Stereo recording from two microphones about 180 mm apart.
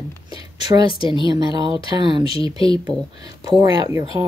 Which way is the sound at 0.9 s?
25° left (ahead or behind).